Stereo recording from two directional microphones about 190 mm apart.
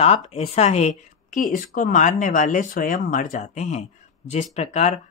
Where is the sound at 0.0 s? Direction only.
30° left (ahead or behind).